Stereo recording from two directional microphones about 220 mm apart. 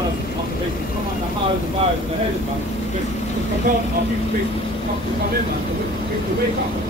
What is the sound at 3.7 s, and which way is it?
Speech, 40° right (ahead or behind).